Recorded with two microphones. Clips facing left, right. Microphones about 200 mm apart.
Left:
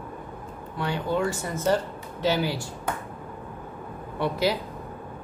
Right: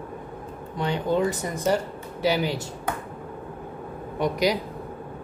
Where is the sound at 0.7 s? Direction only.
20° right (ahead or behind).